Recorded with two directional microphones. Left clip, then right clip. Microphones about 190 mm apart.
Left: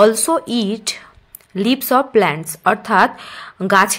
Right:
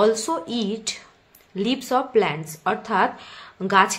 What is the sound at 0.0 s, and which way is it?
Speech, 35° left (ahead or behind).